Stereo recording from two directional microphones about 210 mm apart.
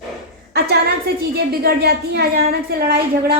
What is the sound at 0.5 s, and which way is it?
A woman's voice, 50° right (ahead or behind).